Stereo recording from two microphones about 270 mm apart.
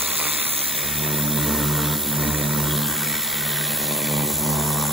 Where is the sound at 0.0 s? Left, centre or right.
Centre.